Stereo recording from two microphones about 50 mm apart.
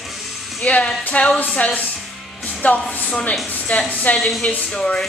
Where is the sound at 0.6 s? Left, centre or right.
Left.